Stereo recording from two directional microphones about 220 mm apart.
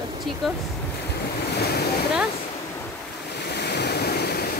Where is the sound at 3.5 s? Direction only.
50° left (ahead or behind).